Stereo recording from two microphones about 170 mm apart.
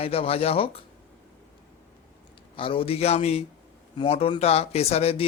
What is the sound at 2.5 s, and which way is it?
A man's voice, 30° left (ahead or behind).